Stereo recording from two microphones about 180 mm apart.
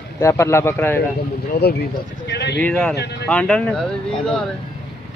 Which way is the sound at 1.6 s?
65° left (ahead or behind).